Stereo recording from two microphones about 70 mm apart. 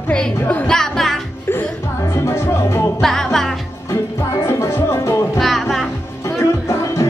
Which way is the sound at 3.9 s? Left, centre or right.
Left.